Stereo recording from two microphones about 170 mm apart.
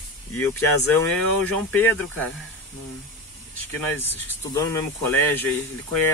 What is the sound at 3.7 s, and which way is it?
Speech, 10° left (ahead or behind).